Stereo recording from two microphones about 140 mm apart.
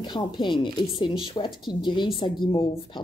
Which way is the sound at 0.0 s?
35° left (ahead or behind).